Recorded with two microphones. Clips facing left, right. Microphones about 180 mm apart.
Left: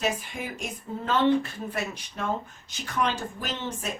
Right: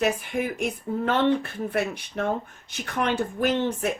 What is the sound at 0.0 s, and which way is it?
Speech, 60° right (ahead or behind).